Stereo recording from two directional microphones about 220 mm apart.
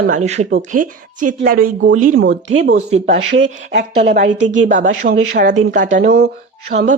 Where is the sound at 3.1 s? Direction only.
50° right (ahead or behind).